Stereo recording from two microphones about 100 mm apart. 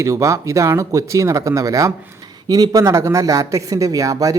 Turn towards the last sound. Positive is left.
turn(degrees=-35)  # may be behind; listen again after turning